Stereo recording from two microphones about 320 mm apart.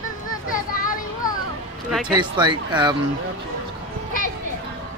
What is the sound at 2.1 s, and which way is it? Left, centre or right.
Speech, centre.